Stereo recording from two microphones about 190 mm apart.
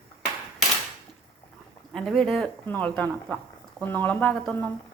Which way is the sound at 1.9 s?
Centre (ahead or behind).